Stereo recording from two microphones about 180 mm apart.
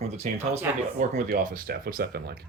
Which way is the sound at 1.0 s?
50° right (ahead or behind).